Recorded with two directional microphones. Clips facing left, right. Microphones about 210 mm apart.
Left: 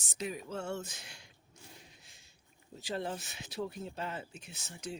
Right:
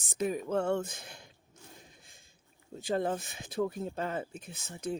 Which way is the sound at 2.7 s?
50° right (ahead or behind).